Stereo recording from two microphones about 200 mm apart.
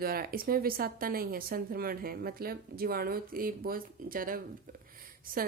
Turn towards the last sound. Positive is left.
turn(degrees=-45)  # may be behind; listen again after turning